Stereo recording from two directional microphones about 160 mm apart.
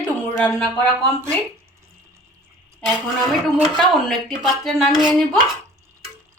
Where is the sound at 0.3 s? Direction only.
10° left (ahead or behind).